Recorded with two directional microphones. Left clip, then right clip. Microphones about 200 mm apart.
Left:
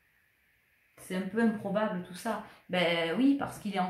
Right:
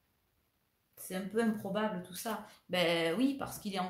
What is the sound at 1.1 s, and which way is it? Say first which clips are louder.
Speech: left 3 dB; 45° right (ahead or behind).